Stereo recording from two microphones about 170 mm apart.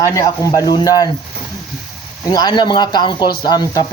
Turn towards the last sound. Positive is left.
turn(degrees=25)  # may be behind; listen again after turning